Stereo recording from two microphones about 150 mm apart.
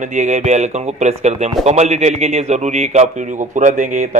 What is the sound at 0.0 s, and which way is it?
A man's voice, 55° right (ahead or behind).